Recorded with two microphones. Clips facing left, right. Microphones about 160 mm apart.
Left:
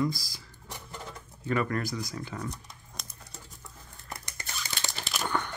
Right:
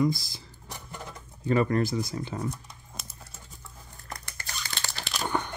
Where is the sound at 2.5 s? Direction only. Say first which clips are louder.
Right 4 dB; 5° right (ahead or behind).